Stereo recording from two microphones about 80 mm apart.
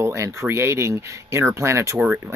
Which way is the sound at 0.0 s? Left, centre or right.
Right.